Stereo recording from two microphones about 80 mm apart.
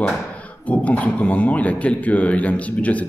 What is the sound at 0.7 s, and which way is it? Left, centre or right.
A man's voice, centre.